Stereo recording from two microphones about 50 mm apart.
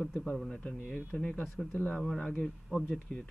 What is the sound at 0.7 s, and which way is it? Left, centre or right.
Speech, left.